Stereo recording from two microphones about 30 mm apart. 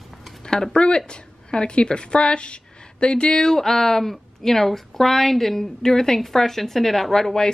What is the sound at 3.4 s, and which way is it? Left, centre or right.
Speech, centre.